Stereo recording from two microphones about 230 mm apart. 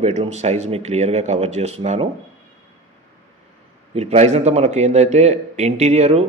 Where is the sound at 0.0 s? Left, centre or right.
Right.